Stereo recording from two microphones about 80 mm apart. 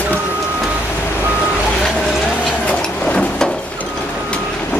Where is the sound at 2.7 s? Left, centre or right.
Centre.